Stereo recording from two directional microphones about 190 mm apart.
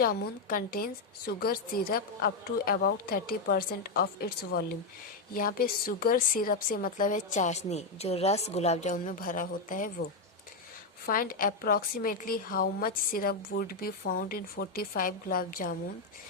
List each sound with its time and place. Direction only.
0.0 s a woman's voice: 50° left (ahead or behind)
11.0 s a woman's voice: 50° left (ahead or behind)